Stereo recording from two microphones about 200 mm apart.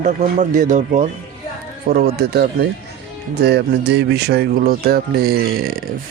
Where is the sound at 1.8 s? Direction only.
50° right (ahead or behind).